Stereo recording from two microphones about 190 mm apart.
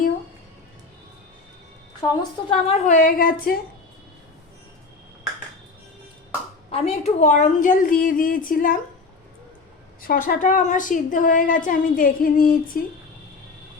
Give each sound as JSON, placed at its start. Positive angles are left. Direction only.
{"t": 2.0, "sound": "a woman's voice", "side_deg": 20}
{"t": 2.5, "sound": "a woman's voice", "side_deg": 35}
{"t": 6.7, "sound": "a woman's voice", "side_deg": 30}
{"t": 10.0, "sound": "a woman's voice", "side_deg": 50}